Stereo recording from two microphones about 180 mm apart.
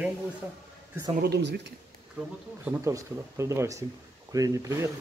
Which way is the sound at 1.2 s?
70° right (ahead or behind).